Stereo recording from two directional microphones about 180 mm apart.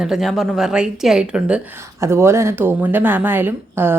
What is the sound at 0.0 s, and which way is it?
A woman's voice, centre (ahead or behind).